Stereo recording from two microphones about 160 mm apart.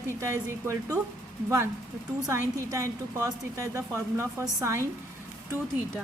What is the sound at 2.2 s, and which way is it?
A woman's voice, 20° right (ahead or behind).